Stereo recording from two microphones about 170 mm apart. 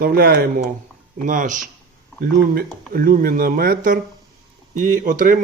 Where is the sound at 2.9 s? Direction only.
60° right (ahead or behind).